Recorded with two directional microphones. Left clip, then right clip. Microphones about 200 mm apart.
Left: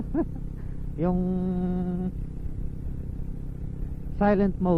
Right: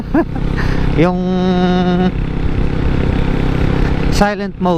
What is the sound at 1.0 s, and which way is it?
Music, 10° right (ahead or behind).